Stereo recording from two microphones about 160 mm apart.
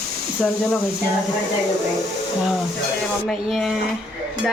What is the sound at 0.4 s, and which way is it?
Speech, 5° left (ahead or behind).